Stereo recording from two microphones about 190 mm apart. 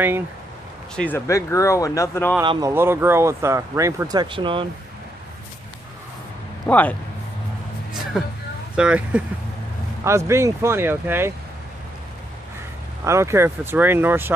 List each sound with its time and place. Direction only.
0.9 s speech: 10° left (ahead or behind)
2.4 s speech: 25° right (ahead or behind)
2.7 s speech: 10° right (ahead or behind)
6.7 s speech: 10° left (ahead or behind)
8.2 s speech: centre (ahead or behind)
13.0 s speech: 15° right (ahead or behind)